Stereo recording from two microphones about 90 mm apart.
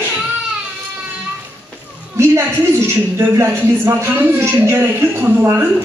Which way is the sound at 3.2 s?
30° right (ahead or behind).